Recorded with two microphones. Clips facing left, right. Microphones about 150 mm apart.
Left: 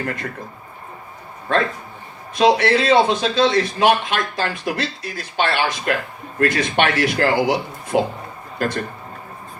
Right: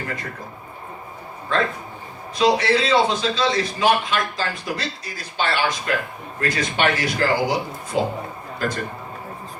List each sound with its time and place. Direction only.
1.5 s a man's voice: 60° left (ahead or behind)